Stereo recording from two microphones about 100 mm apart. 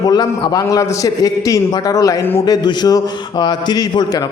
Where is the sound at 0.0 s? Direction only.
40° left (ahead or behind).